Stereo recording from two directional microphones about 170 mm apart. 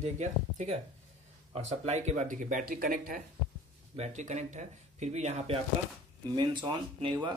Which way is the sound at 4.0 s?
45° right (ahead or behind).